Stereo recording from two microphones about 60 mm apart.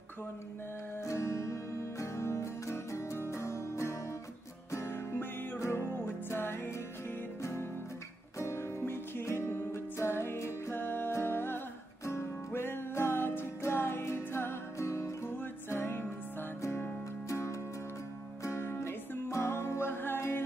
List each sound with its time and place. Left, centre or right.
1.0 s music: left
8.4 s music: left
17.3 s music: left